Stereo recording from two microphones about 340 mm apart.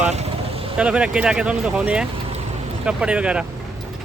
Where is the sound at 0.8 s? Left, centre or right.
Centre.